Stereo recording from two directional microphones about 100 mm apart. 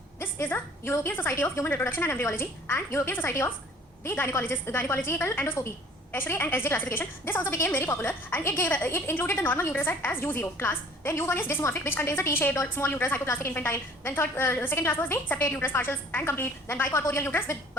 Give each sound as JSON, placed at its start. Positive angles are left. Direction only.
{"t": 0.2, "sound": "a woman's voice", "side_deg": 20}